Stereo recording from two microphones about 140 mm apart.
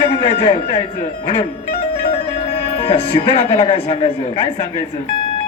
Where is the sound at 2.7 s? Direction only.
40° left (ahead or behind).